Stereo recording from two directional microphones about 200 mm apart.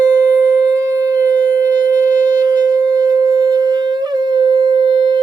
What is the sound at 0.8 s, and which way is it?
Shofar, 15° right (ahead or behind).